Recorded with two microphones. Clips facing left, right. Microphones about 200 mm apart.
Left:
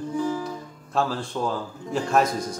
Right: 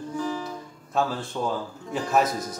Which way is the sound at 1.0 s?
Centre (ahead or behind).